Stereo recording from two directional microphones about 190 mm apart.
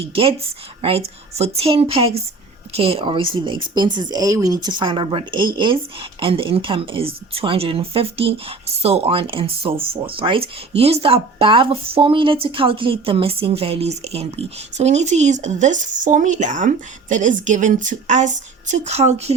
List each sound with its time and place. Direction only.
0.0 s a woman's voice: 30° right (ahead or behind)